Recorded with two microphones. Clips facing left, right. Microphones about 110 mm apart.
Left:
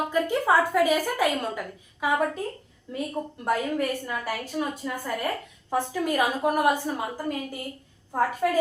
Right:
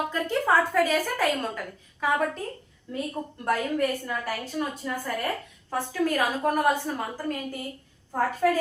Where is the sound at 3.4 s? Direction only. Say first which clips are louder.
Right 1 dB; 10° left (ahead or behind).